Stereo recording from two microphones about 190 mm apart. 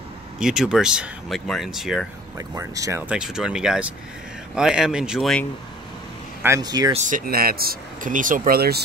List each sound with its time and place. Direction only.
0.4 s speech: 5° right (ahead or behind)
2.3 s speech: 20° right (ahead or behind)
3.1 s speech: 5° right (ahead or behind)
6.4 s speech: 20° right (ahead or behind)
7.0 s speech: 45° right (ahead or behind)